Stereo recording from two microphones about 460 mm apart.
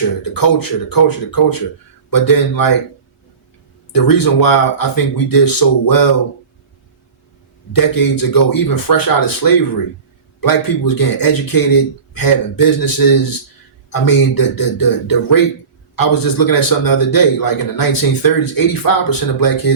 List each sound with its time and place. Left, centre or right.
0.3 s a man's voice: left
3.9 s a man's voice: left
7.7 s a man's voice: left